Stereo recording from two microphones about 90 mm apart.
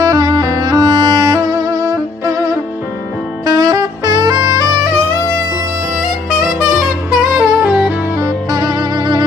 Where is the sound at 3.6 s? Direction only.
50° right (ahead or behind).